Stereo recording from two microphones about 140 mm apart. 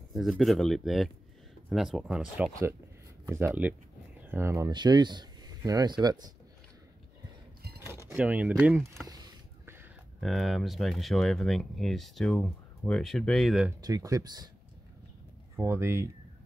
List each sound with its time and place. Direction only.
0.1 s speech: centre (ahead or behind); by 4.6 s 20° right (ahead or behind)
4.6 s speech: 30° right (ahead or behind)
8.1 s speech: 10° right (ahead or behind)
9.0 s a sound: 30° right (ahead or behind)
10.2 s speech: centre (ahead or behind)
13.7 s speech: 25° right (ahead or behind)
15.5 s speech: 20° right (ahead or behind)